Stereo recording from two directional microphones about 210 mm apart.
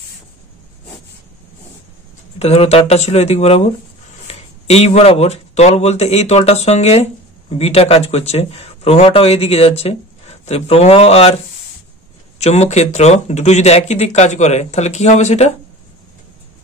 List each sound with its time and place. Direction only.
2.3 s speech: 30° left (ahead or behind)
12.4 s speech: 30° left (ahead or behind)